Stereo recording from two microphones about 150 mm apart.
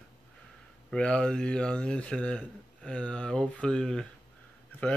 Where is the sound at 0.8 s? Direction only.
5° left (ahead or behind).